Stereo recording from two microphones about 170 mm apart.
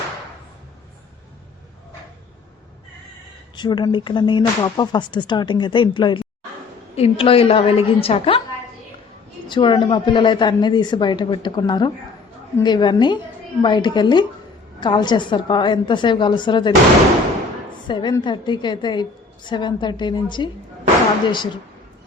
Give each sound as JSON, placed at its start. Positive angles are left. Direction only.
{"t": 3.5, "sound": "a woman's voice", "side_deg": 25}
{"t": 9.5, "sound": "speech", "side_deg": 30}
{"t": 17.8, "sound": "speech", "side_deg": 25}